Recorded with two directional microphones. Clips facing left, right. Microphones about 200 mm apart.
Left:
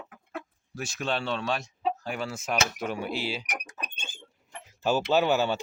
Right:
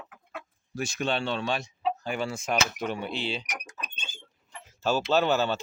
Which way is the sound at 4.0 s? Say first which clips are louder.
Left 1 dB; 50° left (ahead or behind).